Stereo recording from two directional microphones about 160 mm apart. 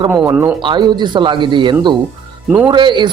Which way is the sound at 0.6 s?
30° right (ahead or behind).